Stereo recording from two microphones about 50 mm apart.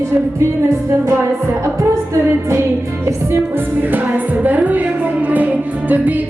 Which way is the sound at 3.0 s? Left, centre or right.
Right.